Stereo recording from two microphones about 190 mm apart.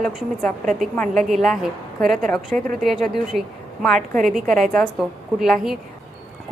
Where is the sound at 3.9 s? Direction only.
45° right (ahead or behind).